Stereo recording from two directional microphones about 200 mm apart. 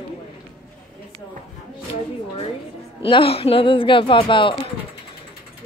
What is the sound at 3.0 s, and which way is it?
Speech, 25° left (ahead or behind).